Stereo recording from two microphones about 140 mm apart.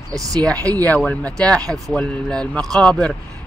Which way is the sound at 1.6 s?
25° right (ahead or behind).